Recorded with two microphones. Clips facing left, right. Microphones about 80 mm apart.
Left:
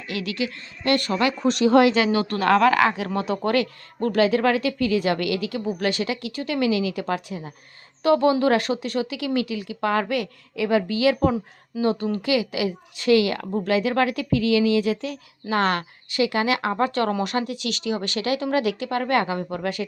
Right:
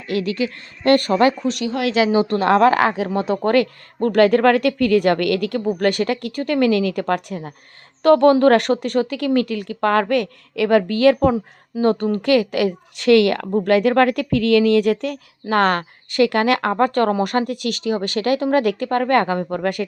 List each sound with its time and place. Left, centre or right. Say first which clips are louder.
0.1 s a woman's voice: right 6 dB; right
1.4 s speech: left 1 dB; left
2.1 s speech: right 4 dB; right